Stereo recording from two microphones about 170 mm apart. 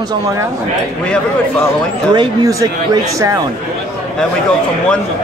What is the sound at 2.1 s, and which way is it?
Speech, 20° right (ahead or behind).